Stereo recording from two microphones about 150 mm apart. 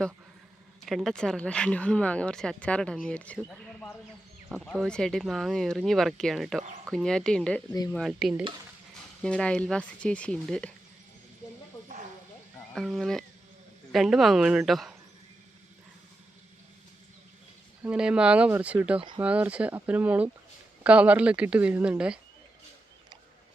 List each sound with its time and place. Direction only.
0.9 s speech: centre (ahead or behind)
7.7 s speech: 25° left (ahead or behind)
7.9 s speech: centre (ahead or behind)
9.2 s speech: 5° left (ahead or behind)
12.7 s speech: centre (ahead or behind)
17.8 s speech: 5° right (ahead or behind)